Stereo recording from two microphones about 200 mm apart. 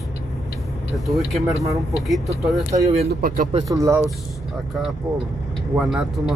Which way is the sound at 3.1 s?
45° right (ahead or behind).